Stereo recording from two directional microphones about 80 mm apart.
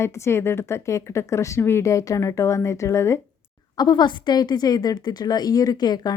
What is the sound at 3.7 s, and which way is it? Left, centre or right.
A woman's voice, left.